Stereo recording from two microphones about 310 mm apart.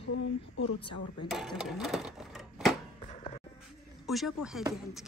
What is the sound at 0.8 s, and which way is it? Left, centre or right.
Speech, centre.